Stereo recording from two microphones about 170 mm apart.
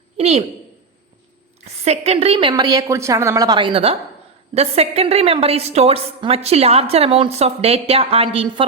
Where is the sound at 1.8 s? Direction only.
40° right (ahead or behind).